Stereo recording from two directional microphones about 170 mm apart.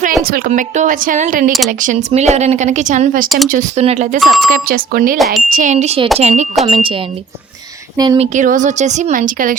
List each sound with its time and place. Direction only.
0.3 s speech: 60° right (ahead or behind)
3.2 s speech: centre (ahead or behind)
3.5 s speech: 40° right (ahead or behind)
4.2 s speech: centre (ahead or behind)
4.5 s speech: 55° right (ahead or behind)
5.1 s speech: centre (ahead or behind)
5.5 s speech: 50° right (ahead or behind)
7.9 s speech: 25° right (ahead or behind)
8.2 s speech: 45° right (ahead or behind)